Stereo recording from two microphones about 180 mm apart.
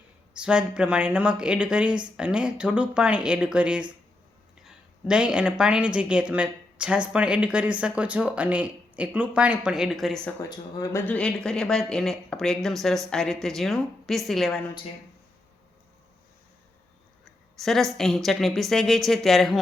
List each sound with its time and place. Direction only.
0.3 s a woman's voice: 5° right (ahead or behind)
10.8 s speech: 10° left (ahead or behind)
17.2 s speech: centre (ahead or behind)